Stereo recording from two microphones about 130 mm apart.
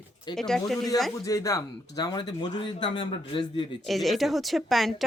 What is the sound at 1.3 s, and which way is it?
Speech, 25° left (ahead or behind).